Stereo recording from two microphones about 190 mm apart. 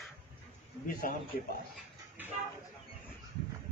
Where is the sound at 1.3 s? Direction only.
50° left (ahead or behind).